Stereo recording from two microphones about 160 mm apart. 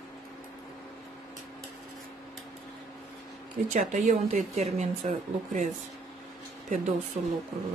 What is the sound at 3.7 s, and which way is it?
Speech, 50° right (ahead or behind).